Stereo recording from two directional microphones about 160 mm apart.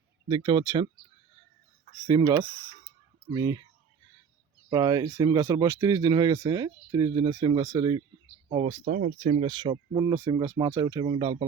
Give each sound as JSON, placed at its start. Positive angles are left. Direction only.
{"t": 0.3, "sound": "speech", "side_deg": -25}
{"t": 2.0, "sound": "speech", "side_deg": -25}
{"t": 4.7, "sound": "speech", "side_deg": -20}
{"t": 8.8, "sound": "speech", "side_deg": -60}
{"t": 9.2, "sound": "speech", "side_deg": -40}
{"t": 9.5, "sound": "speech", "side_deg": -25}